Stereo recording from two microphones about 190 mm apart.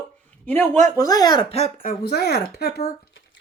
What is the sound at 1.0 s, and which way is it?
Speech, 20° left (ahead or behind).